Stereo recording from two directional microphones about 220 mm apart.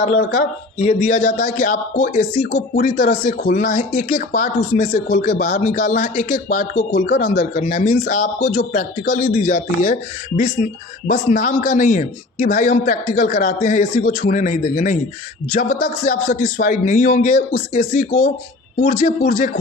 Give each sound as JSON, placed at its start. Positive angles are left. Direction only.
{"t": 0.2, "sound": "speech", "side_deg": 55}
{"t": 0.8, "sound": "a man's voice", "side_deg": 35}